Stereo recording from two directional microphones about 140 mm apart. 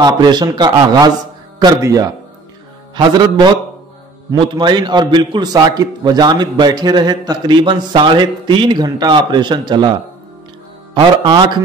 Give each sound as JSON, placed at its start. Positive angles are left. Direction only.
{"t": 0.0, "sound": "a man's voice", "side_deg": -30}
{"t": 4.6, "sound": "a man's voice", "side_deg": -35}
{"t": 11.0, "sound": "a man's voice", "side_deg": -35}